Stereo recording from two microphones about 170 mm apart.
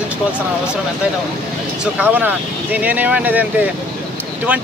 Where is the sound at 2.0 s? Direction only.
10° right (ahead or behind).